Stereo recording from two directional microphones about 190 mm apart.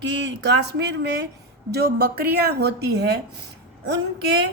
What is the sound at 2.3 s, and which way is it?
Speech, 55° right (ahead or behind).